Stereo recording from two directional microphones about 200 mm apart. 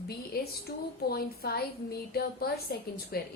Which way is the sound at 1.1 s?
50° left (ahead or behind).